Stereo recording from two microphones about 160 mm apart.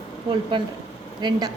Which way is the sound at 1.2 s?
25° right (ahead or behind).